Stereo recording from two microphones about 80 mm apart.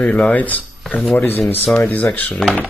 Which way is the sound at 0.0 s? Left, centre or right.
Centre.